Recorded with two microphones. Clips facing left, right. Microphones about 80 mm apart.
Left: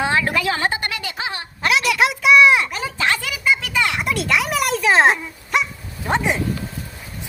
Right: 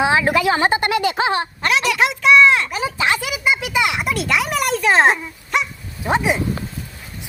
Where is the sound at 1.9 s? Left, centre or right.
Centre.